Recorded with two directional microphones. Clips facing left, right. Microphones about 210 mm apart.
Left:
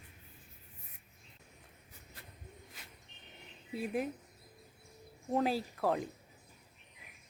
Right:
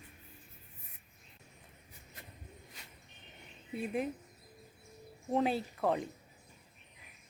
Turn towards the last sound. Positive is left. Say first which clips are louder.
# even
turn(degrees=0)  # may be behind; listen again after turning